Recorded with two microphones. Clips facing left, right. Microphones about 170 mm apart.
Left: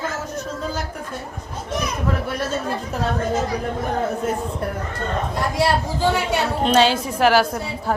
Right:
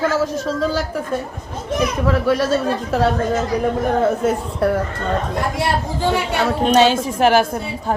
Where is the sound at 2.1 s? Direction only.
90° right.